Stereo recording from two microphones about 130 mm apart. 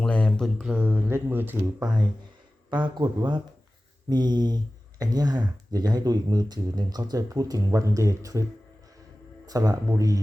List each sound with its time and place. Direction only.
0.0 s mantra: 5° left (ahead or behind)
0.6 s speech: 15° right (ahead or behind)
1.8 s speech: 35° right (ahead or behind)
9.5 s speech: 30° right (ahead or behind)